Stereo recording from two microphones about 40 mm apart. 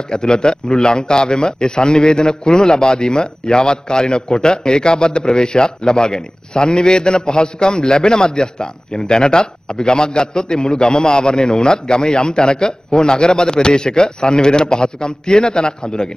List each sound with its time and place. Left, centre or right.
0.1 s a man's voice: centre